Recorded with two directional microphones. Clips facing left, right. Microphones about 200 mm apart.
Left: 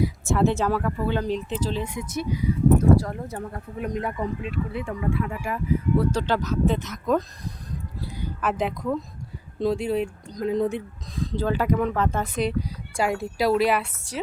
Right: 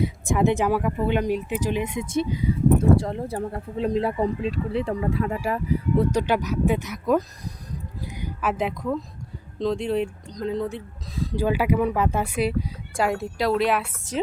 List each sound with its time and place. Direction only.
0.0 s speech: 15° right (ahead or behind); by 5.5 s 35° right (ahead or behind)
6.0 s speech: 15° right (ahead or behind)
8.0 s a sound: 15° right (ahead or behind)
8.4 s speech: 5° right (ahead or behind)
10.5 s speech: 15° left (ahead or behind)
11.2 s speech: 10° right (ahead or behind)